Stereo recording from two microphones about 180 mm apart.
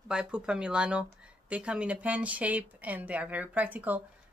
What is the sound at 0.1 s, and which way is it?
Speech, 5° right (ahead or behind).